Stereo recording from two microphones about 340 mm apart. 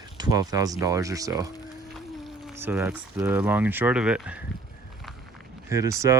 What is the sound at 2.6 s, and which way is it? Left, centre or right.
Speech, centre.